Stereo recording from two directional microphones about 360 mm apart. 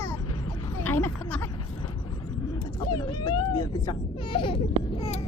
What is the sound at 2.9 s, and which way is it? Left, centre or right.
Speech, centre.